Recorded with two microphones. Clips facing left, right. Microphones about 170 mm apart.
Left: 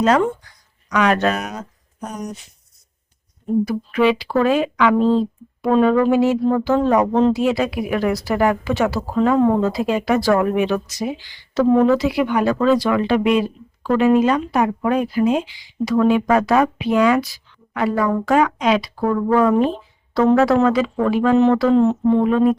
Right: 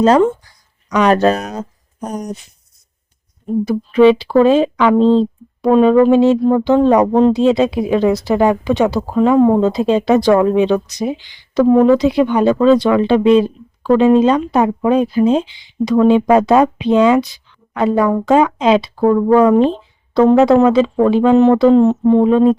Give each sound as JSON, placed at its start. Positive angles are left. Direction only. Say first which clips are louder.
{"t": 0.0, "sound": "speech", "louder": "right 5 dB", "side_deg": -30}
{"t": 3.7, "sound": "speech", "louder": "right 11 dB", "side_deg": -30}